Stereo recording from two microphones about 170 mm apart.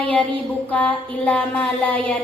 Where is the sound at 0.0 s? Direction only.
10° left (ahead or behind).